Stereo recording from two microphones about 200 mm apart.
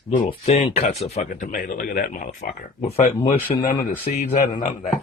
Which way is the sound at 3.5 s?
35° left (ahead or behind).